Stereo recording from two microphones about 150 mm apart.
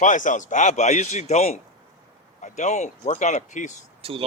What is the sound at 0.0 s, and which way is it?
A man's voice, 55° left (ahead or behind).